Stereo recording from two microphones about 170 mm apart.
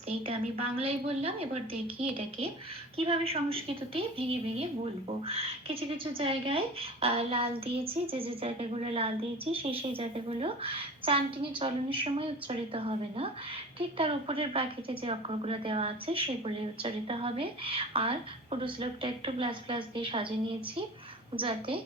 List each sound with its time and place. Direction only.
0.3 s a woman's voice: 35° right (ahead or behind)
6.1 s a woman's voice: 30° right (ahead or behind)